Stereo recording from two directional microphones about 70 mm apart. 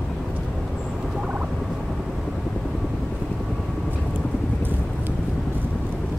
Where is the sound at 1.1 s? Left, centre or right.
Centre.